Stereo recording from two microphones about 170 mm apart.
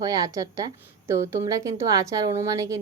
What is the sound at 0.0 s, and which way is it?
Speech, 20° right (ahead or behind).